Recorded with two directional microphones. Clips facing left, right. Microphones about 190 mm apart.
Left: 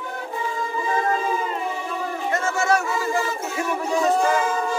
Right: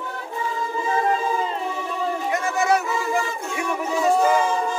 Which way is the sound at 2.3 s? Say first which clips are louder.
Even; 15° right (ahead or behind).